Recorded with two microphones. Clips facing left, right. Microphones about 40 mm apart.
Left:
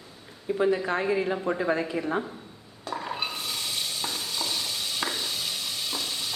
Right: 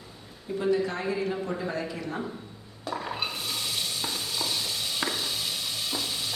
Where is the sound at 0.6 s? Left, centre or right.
Left.